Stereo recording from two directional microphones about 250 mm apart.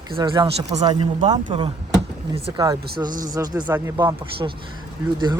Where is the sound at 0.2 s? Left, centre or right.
Centre.